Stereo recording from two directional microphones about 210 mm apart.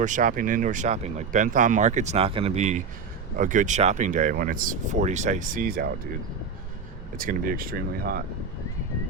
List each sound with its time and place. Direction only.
0.0 s speech: 35° right (ahead or behind)
7.2 s speech: 45° right (ahead or behind)